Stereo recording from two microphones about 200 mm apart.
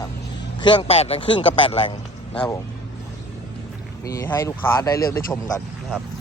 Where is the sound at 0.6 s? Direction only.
25° left (ahead or behind).